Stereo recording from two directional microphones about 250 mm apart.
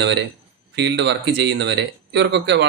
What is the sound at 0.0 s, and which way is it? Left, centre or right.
Speech, right.